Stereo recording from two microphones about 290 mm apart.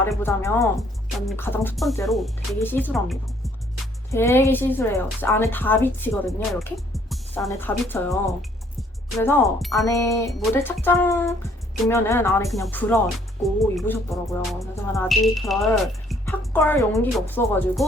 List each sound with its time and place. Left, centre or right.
0.0 s a woman's voice: centre